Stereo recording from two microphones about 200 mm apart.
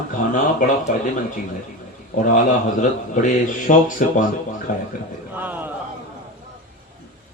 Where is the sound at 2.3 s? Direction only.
40° left (ahead or behind).